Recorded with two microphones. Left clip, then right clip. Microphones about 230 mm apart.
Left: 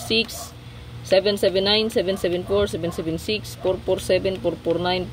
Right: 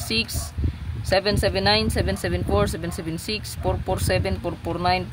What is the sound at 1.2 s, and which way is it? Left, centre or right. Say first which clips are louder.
Speech: left 2 dB; right.